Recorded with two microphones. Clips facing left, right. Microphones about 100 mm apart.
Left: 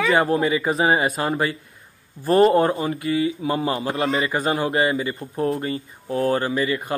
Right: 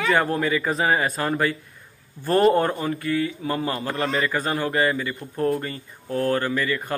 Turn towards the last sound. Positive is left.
turn(degrees=15)  # may be behind; listen again after turning